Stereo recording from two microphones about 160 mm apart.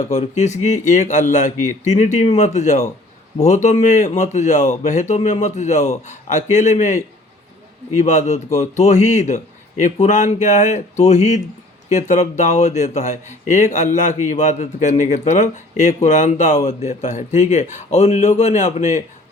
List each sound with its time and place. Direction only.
0.0 s speech: 45° left (ahead or behind)